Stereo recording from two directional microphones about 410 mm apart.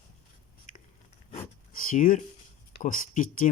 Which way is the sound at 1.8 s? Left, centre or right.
Centre.